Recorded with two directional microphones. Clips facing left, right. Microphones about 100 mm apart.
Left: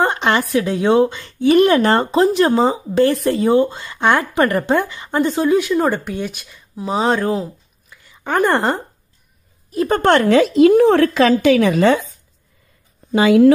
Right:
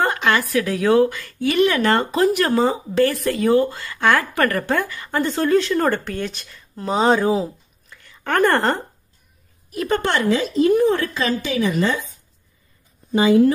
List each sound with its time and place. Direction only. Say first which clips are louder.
0.0 s a woman's voice: left 2 dB; 25° left (ahead or behind)
1.5 s speech: left 6 dB; 40° left (ahead or behind)
1.8 s speech: left 3 dB; 30° left (ahead or behind); by 8.0 s centre (ahead or behind)
8.0 s speech: left 1 dB; 15° left (ahead or behind)
9.7 s a woman's voice: left 4 dB; 35° left (ahead or behind)
10.0 s a woman's voice: left 10 dB; 60° left (ahead or behind); by 11.9 s 80° left
13.1 s speech: left 3 dB; 85° left